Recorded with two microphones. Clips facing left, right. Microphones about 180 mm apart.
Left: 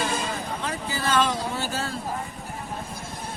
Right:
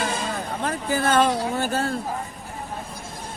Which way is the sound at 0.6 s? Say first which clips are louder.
Right 6 dB; 50° right (ahead or behind).